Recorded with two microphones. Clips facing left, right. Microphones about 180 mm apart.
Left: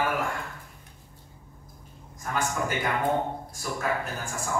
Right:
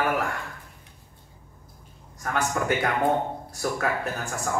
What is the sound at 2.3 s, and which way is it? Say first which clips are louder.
A man's voice: right 3 dB; 65° right (ahead or behind).